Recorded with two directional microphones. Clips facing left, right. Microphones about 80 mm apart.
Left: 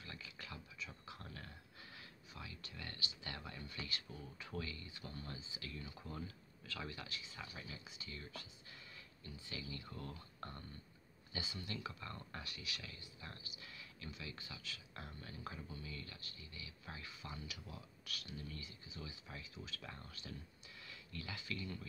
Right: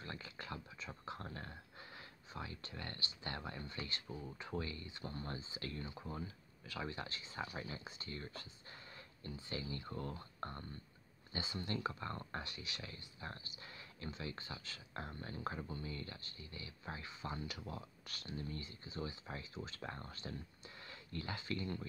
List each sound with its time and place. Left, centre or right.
0.0 s speech: right
5.9 s speech: right
6.9 s speech: right